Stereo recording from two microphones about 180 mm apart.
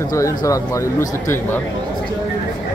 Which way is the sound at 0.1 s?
20° left (ahead or behind).